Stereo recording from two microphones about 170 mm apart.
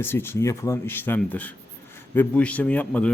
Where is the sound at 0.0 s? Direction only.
15° left (ahead or behind).